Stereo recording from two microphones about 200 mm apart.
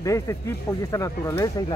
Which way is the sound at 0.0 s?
15° left (ahead or behind).